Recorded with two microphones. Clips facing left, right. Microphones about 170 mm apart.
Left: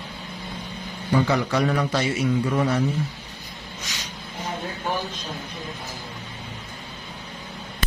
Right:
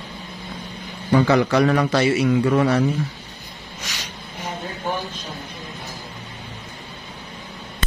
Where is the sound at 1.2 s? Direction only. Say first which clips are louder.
Right 8 dB; 85° right.